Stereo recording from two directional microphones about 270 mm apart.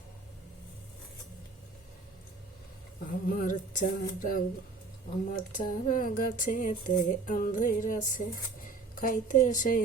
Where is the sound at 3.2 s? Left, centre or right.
Left.